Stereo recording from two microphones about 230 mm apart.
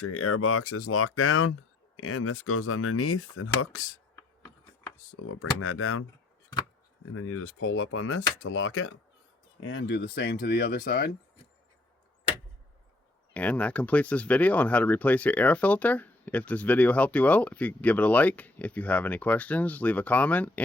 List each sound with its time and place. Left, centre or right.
0.0 s speech: left
5.2 s speech: left
7.1 s speech: left
13.3 s speech: centre